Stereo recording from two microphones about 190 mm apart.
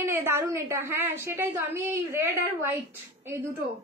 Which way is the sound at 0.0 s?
15° right (ahead or behind).